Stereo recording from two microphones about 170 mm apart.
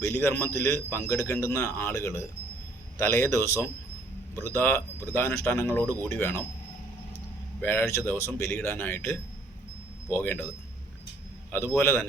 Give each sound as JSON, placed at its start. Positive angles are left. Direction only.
{"t": 0.0, "sound": "a man's voice", "side_deg": 15}
{"t": 7.6, "sound": "a man's voice", "side_deg": 10}
{"t": 11.5, "sound": "a man's voice", "side_deg": 15}